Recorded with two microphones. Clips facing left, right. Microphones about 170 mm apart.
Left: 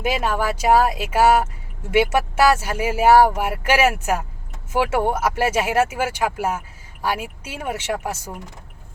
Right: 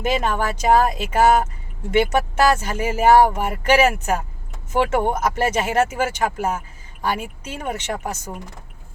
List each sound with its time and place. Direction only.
0.0 s speech: 10° left (ahead or behind)